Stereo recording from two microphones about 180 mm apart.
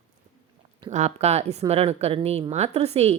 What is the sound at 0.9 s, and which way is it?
A woman's voice, 40° right (ahead or behind).